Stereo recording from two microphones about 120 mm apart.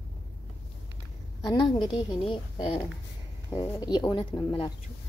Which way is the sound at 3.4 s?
35° left (ahead or behind).